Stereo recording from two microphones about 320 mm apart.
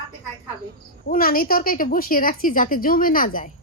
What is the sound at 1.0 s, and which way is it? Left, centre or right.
A woman's voice, left.